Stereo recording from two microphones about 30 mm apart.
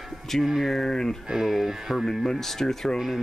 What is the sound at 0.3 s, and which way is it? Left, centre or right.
Speech, centre.